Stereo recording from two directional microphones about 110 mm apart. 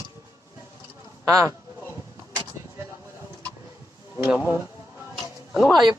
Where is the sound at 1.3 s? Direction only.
30° right (ahead or behind).